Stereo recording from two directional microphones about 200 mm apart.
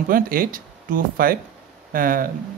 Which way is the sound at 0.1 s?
45° right (ahead or behind).